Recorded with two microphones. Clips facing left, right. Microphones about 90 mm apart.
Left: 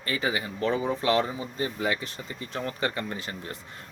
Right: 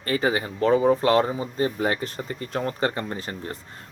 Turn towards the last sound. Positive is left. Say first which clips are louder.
# right 3 dB
turn(degrees=-35)  # may be behind; listen again after turning